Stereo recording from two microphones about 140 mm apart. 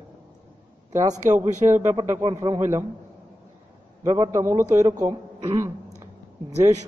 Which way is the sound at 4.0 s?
25° right (ahead or behind).